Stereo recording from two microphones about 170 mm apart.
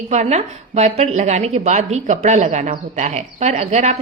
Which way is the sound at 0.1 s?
40° right (ahead or behind).